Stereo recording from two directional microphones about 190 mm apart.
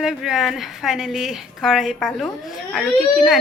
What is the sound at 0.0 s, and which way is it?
A woman's voice, centre (ahead or behind).